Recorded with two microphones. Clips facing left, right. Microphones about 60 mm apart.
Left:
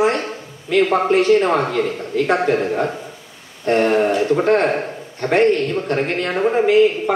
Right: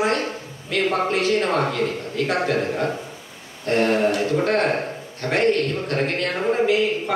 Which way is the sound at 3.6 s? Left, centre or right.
Left.